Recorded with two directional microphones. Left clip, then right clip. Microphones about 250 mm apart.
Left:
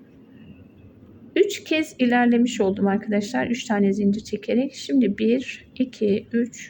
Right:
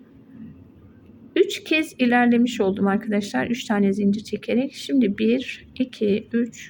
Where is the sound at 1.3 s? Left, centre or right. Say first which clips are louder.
Even; centre.